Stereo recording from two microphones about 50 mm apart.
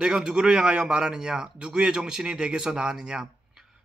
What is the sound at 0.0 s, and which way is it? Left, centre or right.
Speech, centre.